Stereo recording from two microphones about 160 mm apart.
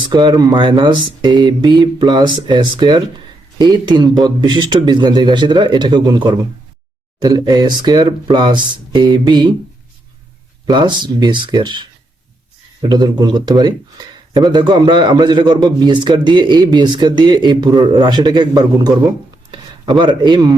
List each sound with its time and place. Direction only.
0.1 s speech: 25° right (ahead or behind)
10.7 s speech: 30° right (ahead or behind)